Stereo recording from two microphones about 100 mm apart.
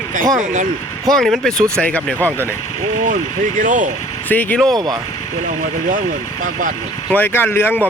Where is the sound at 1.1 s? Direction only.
5° left (ahead or behind).